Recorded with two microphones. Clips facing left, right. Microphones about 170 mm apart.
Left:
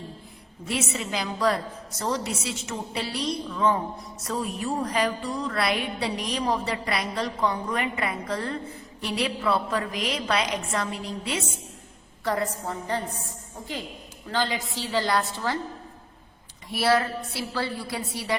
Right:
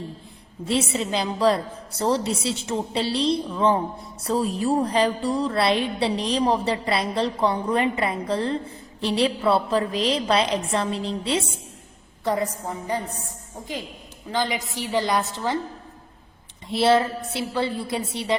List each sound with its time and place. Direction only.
0.6 s a woman's voice: 30° right (ahead or behind)
14.3 s a woman's voice: 15° right (ahead or behind)
16.6 s a woman's voice: 25° right (ahead or behind)